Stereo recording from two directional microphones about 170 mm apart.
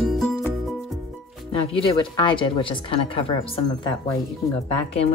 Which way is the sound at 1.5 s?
30° left (ahead or behind).